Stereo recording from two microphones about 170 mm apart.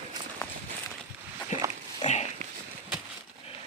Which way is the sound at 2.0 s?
25° left (ahead or behind).